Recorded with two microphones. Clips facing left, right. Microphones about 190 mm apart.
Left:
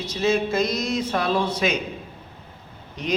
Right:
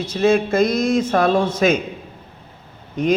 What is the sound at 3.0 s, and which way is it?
Speech, 50° right (ahead or behind).